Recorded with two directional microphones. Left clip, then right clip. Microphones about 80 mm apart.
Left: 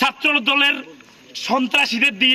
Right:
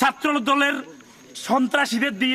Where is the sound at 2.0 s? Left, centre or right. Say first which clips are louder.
Left 7 dB; right.